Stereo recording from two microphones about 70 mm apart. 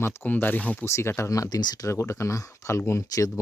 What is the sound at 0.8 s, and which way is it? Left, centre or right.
Speech, left.